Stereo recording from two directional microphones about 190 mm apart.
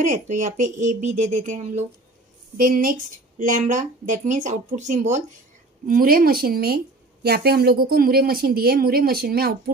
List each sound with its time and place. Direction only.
0.0 s a woman's voice: 40° right (ahead or behind)